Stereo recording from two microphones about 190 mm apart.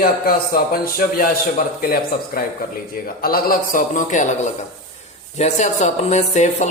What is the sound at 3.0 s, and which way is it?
Speech, 50° left (ahead or behind).